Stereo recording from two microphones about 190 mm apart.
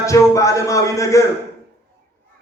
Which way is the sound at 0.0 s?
15° left (ahead or behind).